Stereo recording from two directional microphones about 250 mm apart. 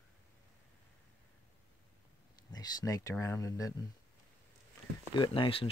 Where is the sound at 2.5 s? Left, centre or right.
Centre.